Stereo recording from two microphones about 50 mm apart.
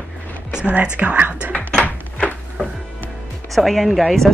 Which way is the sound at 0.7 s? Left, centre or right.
Right.